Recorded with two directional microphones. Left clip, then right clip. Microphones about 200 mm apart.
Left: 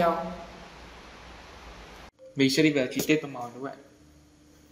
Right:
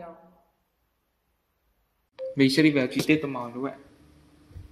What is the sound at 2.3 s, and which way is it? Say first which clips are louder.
Speech: right 2 dB; 25° right (ahead or behind).